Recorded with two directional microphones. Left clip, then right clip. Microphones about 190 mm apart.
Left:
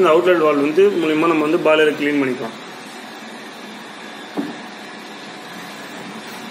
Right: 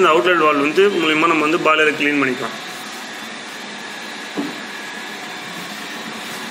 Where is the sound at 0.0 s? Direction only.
15° left (ahead or behind).